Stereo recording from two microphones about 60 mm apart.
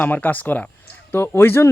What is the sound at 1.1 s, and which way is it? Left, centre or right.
Speech, left.